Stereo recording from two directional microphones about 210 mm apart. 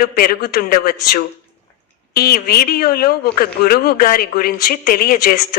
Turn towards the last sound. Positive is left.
turn(degrees=45)  # may be behind; listen again after turning